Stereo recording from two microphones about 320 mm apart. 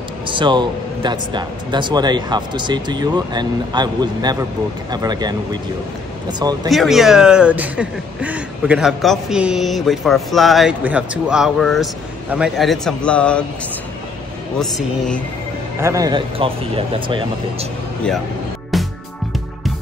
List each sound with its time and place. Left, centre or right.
0.3 s speech: centre
6.7 s speech: centre
14.6 s speech: centre
15.8 s speech: centre
18.7 s music: centre